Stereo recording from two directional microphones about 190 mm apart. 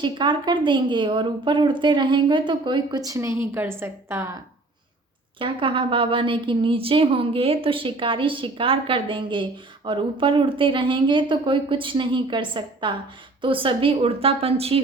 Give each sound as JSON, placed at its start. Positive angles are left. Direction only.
{"t": 0.0, "sound": "a woman's voice", "side_deg": -25}
{"t": 5.4, "sound": "a woman's voice", "side_deg": -25}